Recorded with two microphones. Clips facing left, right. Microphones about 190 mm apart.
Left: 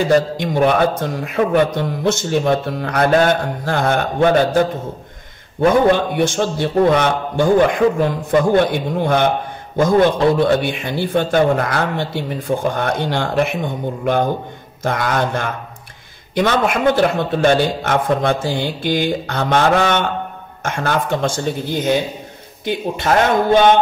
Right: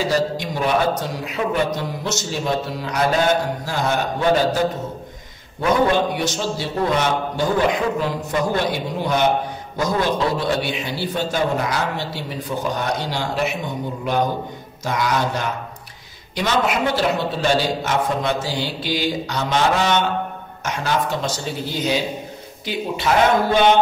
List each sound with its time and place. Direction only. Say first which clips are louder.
0.0 s a man's voice: left 5 dB; 55° left (ahead or behind)
6.1 s a man's voice: left 6 dB; 55° left (ahead or behind)